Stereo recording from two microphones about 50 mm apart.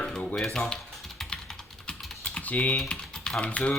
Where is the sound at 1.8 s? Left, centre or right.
Left.